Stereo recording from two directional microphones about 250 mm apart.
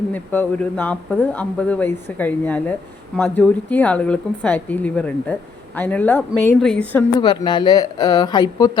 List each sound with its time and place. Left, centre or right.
0.1 s a woman's voice: centre
7.2 s a woman's voice: centre